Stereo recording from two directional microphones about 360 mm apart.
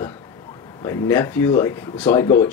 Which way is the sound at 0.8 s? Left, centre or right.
Centre.